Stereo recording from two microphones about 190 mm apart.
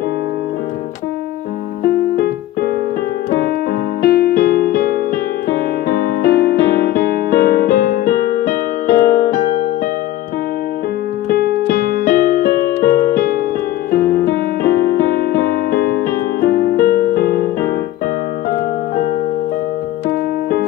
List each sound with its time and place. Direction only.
1.9 s keyboard: 55° left (ahead or behind)
4.0 s music: 55° left (ahead or behind)
11.2 s keyboard: 55° left (ahead or behind)
13.9 s piano: 55° left (ahead or behind)